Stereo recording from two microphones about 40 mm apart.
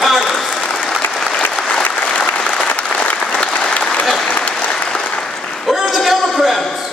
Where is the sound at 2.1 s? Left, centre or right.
Left.